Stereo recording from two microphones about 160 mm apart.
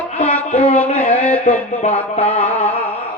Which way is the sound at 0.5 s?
40° left (ahead or behind).